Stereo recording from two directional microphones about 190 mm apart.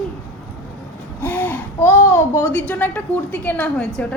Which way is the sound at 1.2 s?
10° left (ahead or behind).